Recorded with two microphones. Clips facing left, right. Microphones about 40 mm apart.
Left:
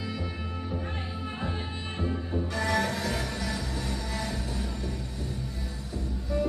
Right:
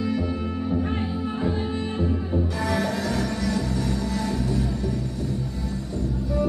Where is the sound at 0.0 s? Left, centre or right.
Centre.